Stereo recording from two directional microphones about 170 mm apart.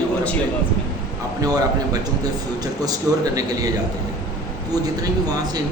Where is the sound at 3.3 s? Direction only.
20° right (ahead or behind).